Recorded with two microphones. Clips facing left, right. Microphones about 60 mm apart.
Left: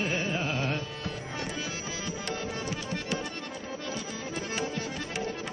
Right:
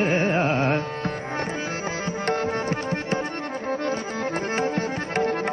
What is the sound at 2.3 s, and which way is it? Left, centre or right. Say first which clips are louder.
Music: right 11 dB; right.